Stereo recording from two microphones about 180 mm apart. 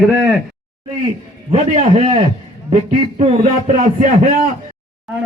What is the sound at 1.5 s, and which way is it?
A man's voice, 35° right (ahead or behind).